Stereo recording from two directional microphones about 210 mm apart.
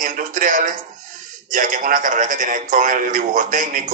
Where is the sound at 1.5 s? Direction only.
40° right (ahead or behind).